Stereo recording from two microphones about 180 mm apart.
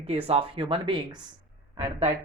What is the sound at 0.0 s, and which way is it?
Speech, 35° right (ahead or behind).